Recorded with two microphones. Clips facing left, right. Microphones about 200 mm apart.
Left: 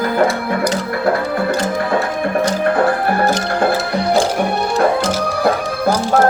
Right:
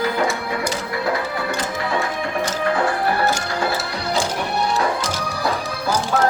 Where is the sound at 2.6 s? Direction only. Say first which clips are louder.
Left 2 dB; 55° left (ahead or behind).